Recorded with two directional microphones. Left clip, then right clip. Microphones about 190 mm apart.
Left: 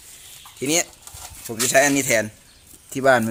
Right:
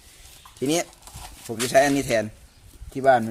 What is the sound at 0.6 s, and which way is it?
Speech, 25° right (ahead or behind).